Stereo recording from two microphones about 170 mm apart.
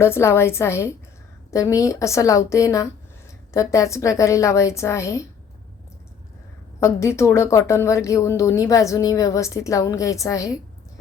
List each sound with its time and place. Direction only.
0.0 s a woman's voice: 15° left (ahead or behind)
6.7 s a woman's voice: 15° left (ahead or behind)